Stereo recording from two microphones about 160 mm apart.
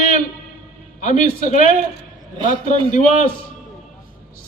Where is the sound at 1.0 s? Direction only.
55° left (ahead or behind).